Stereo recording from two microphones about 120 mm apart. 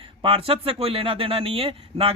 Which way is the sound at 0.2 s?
50° right (ahead or behind).